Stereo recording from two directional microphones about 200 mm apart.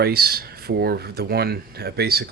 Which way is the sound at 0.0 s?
50° right (ahead or behind).